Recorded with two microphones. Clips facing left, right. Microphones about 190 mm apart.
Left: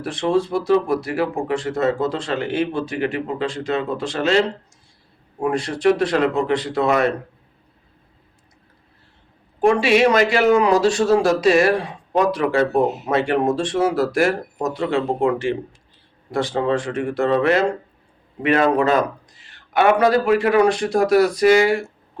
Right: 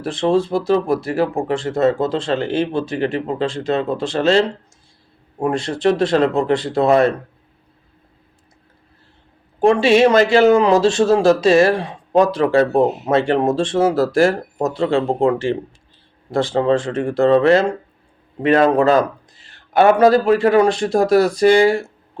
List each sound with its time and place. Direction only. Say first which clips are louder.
0.0 s speech: right 3 dB; 25° right (ahead or behind)
9.6 s a man's voice: right 3 dB; 25° right (ahead or behind)